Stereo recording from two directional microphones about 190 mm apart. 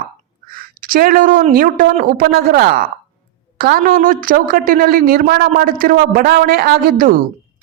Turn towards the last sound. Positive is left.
turn(degrees=-50)  # may be behind; listen again after turning